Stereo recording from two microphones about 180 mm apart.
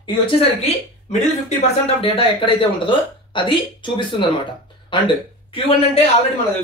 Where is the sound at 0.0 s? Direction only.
25° left (ahead or behind).